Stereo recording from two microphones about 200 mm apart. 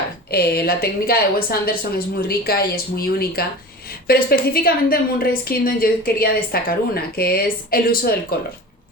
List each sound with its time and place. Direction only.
0.3 s a woman's voice: 50° left (ahead or behind)